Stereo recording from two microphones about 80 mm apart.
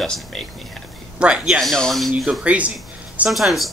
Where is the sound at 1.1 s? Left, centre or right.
Centre.